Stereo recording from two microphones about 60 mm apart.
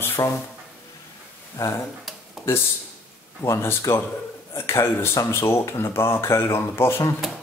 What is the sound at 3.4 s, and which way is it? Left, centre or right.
Speech, left.